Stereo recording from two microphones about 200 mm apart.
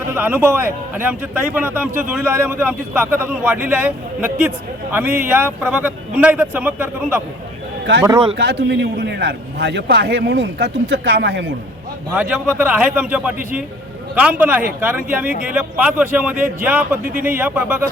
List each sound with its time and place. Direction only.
0.1 s a man's voice: 10° right (ahead or behind)
8.0 s speech: 25° right (ahead or behind)
8.4 s a man's voice: 60° right (ahead or behind)
12.1 s a man's voice: 5° right (ahead or behind)